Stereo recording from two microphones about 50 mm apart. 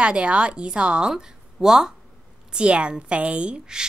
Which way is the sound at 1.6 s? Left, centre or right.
Centre.